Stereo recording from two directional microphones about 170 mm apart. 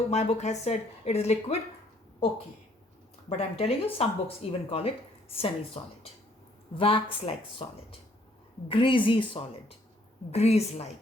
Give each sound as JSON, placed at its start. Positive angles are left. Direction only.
{"t": 0.1, "sound": "speech", "side_deg": 40}
{"t": 3.2, "sound": "speech", "side_deg": 35}